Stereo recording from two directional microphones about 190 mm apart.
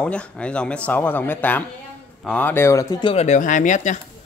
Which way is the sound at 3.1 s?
35° left (ahead or behind).